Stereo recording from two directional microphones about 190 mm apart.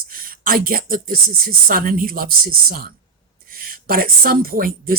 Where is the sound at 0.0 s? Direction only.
50° right (ahead or behind).